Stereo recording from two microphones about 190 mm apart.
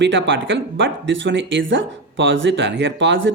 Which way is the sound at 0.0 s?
75° right (ahead or behind).